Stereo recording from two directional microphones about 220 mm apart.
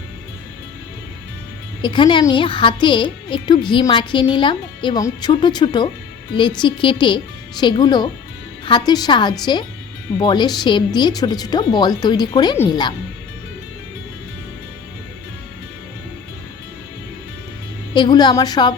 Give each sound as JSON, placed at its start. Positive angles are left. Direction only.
{"t": 1.8, "sound": "speech", "side_deg": 20}
{"t": 17.9, "sound": "speech", "side_deg": 20}